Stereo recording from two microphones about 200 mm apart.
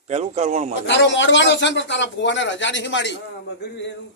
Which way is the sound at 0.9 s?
60° left (ahead or behind).